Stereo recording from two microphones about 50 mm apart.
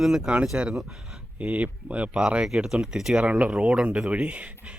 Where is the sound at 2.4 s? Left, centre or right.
Centre.